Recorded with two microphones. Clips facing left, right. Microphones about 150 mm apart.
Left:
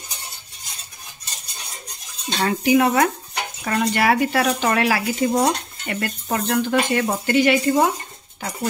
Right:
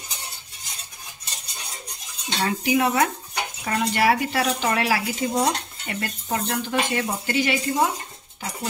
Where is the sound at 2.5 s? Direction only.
55° left (ahead or behind).